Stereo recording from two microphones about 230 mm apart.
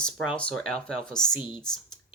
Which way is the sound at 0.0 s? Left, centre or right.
Centre.